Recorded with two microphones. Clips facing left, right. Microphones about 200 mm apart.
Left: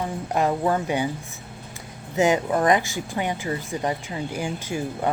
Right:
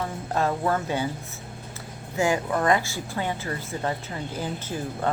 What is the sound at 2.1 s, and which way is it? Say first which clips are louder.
Speech: left 4 dB; 20° left (ahead or behind).